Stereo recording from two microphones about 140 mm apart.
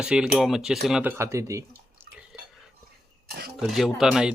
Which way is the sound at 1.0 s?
15° right (ahead or behind).